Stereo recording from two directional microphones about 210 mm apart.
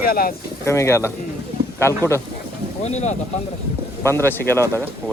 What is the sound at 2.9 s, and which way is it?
Speech, 30° left (ahead or behind).